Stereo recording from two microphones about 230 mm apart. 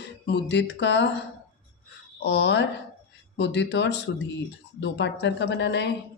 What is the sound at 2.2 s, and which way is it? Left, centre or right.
A woman's voice, left.